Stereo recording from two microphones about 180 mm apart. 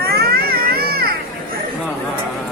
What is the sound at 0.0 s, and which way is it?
Music, 60° right (ahead or behind).